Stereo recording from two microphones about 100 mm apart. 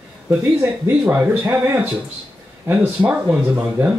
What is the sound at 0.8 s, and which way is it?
Speech, 15° right (ahead or behind).